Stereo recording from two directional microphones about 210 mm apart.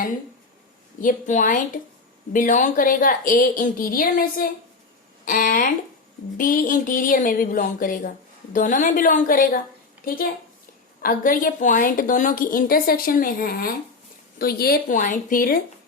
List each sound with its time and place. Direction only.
1.0 s a woman's voice: 40° left (ahead or behind)
11.0 s a woman's voice: 40° left (ahead or behind)